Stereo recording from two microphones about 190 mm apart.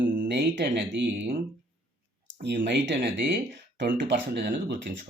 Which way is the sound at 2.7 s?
65° right (ahead or behind).